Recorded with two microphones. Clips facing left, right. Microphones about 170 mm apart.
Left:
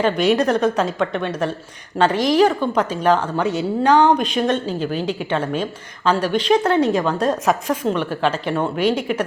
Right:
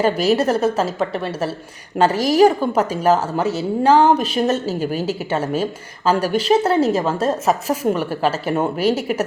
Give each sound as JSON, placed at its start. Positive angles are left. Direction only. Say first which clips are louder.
{"t": 0.0, "sound": "a woman's voice", "louder": "even", "side_deg": -5}